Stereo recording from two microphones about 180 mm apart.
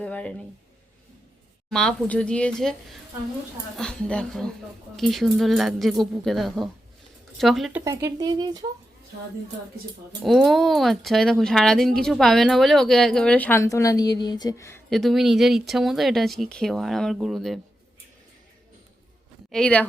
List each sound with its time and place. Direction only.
0.0 s speech: 5° left (ahead or behind)
1.7 s speech: 5° left (ahead or behind)
3.8 s speech: 5° left (ahead or behind)
7.9 s speech: 20° right (ahead or behind)
10.2 s speech: centre (ahead or behind); by 14.8 s 15° left (ahead or behind)
14.8 s speech: centre (ahead or behind)
19.5 s speech: 5° left (ahead or behind)